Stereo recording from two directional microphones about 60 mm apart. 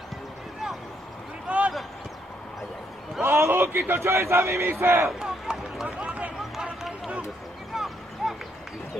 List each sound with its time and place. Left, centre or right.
1.5 s a sound: right
3.2 s a man's voice: right
4.6 s speech: right
5.2 s run: centre
6.0 s run: right
6.5 s run: centre
7.7 s a sound: centre